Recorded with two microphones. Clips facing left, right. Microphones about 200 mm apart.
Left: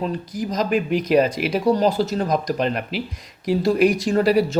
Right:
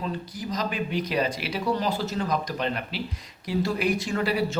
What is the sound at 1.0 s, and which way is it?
Speech, 45° left (ahead or behind).